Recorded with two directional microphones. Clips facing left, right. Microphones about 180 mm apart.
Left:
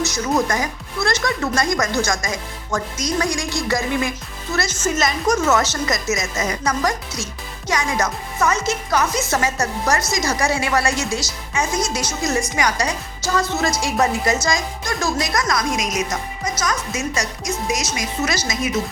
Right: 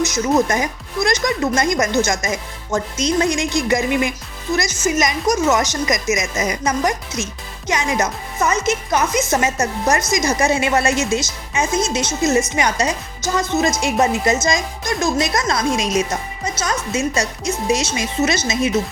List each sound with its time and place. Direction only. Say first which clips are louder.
0.0 s speech: right 3 dB; 20° right (ahead or behind)